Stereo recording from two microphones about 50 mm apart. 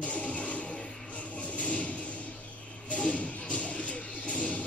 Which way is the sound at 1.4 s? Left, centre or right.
Left.